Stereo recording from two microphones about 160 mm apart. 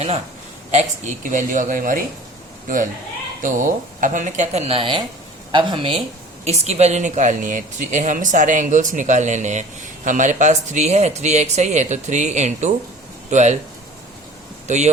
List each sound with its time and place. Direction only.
0.7 s speech: 45° right (ahead or behind)
3.4 s speech: 55° right (ahead or behind); by 6.0 s 30° right (ahead or behind)
6.4 s speech: 45° right (ahead or behind)
14.7 s speech: 50° right (ahead or behind)